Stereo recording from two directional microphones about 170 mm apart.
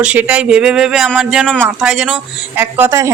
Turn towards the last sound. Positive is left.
turn(degrees=-15)  # may be behind; listen again after turning